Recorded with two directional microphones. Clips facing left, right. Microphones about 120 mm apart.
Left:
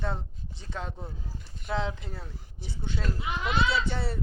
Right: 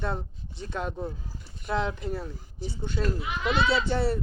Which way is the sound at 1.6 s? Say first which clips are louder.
Right 3 dB; 55° right (ahead or behind).